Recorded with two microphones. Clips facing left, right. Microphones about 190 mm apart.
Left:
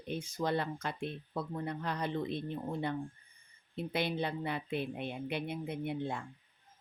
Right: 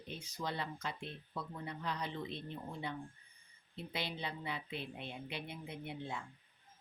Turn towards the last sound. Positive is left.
turn(degrees=55)  # may be behind; listen again after turning